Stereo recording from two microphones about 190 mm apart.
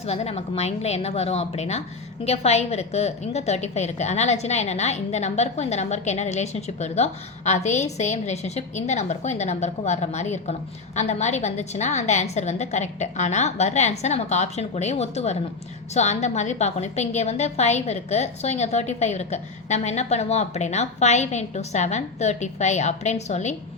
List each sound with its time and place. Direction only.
0.0 s a woman's voice: 35° left (ahead or behind)